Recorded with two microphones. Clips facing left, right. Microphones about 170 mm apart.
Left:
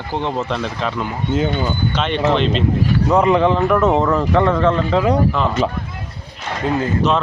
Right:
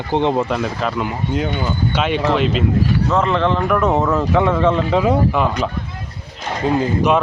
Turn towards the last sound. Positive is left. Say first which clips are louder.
# right 2 dB
turn(degrees=-15)  # may be behind; listen again after turning